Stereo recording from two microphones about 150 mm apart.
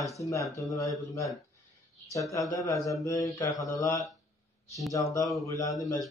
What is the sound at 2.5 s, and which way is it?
Speech, 20° left (ahead or behind).